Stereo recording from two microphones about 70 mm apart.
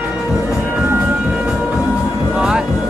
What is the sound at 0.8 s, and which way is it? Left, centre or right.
Train, right.